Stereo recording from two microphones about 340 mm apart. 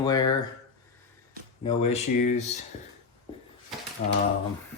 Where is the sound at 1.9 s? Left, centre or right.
Left.